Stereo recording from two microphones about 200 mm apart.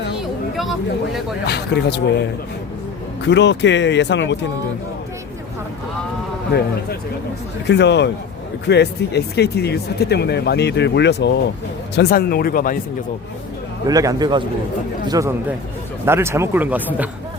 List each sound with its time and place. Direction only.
1.5 s speech: 55° left (ahead or behind)
3.2 s speech: 60° left (ahead or behind)
6.5 s speech: 50° left (ahead or behind)
7.7 s speech: 60° left (ahead or behind)
13.8 s a man's voice: 15° right (ahead or behind)